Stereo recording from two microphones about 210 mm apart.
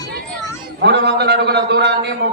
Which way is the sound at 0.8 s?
55° right (ahead or behind).